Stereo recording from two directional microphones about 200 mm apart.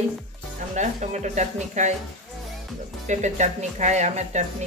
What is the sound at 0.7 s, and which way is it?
Speech, 35° right (ahead or behind).